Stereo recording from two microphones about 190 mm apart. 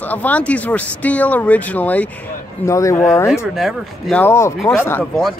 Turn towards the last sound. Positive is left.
turn(degrees=10)  # may be behind; listen again after turning